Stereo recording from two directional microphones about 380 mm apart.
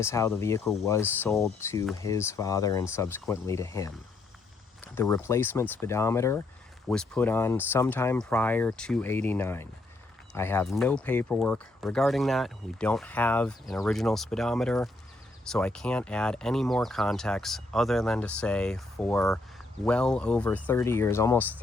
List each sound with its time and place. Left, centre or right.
0.0 s speech: centre
4.9 s speech: centre